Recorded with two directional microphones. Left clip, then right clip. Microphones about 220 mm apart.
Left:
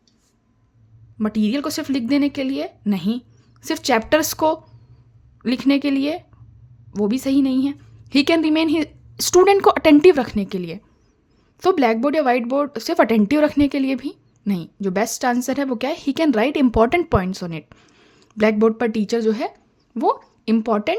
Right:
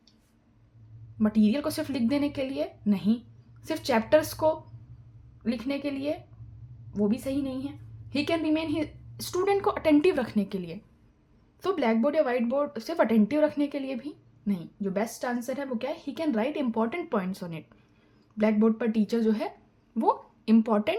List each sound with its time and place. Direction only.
1.2 s a woman's voice: 35° left (ahead or behind)